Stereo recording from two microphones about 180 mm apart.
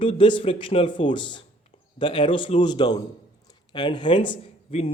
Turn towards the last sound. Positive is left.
turn(degrees=30)  # may be behind; listen again after turning